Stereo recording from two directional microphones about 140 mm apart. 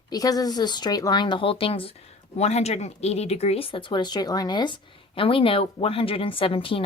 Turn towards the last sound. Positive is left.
turn(degrees=40)  # may be behind; listen again after turning